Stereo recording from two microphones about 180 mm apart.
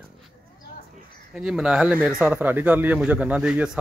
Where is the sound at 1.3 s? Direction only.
5° right (ahead or behind).